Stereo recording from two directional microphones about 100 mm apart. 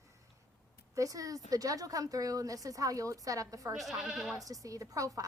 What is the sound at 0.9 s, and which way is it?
A woman's voice, 35° right (ahead or behind).